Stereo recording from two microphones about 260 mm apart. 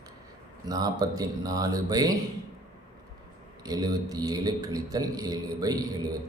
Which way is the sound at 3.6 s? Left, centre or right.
Centre.